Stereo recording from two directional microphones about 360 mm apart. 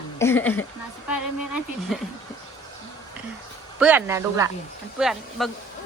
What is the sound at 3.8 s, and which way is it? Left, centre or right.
Speech, centre.